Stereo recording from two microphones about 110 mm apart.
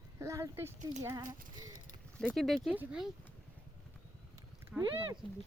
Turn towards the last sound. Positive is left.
turn(degrees=-5)  # may be behind; listen again after turning